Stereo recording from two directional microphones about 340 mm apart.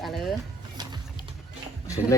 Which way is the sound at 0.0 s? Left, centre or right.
Centre.